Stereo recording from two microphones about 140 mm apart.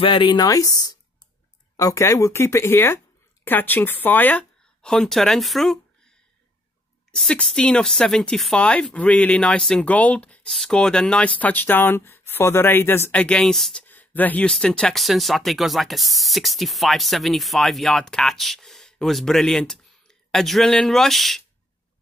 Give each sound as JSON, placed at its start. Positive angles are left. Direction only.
{"t": 0.0, "sound": "speech", "side_deg": 35}
{"t": 7.1, "sound": "speech", "side_deg": 5}
{"t": 13.8, "sound": "speech", "side_deg": 10}